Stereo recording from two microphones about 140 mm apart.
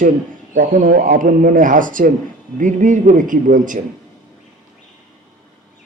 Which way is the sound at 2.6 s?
60° right (ahead or behind).